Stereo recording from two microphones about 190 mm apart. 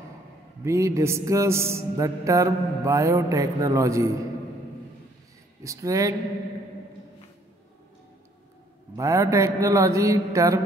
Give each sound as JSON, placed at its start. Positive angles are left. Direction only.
{"t": 0.7, "sound": "mantra", "side_deg": -15}
{"t": 5.6, "sound": "mantra", "side_deg": -15}
{"t": 8.9, "sound": "mantra", "side_deg": -15}